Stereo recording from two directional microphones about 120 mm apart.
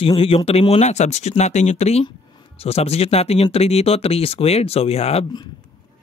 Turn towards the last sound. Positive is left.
turn(degrees=60)  # may be behind; listen again after turning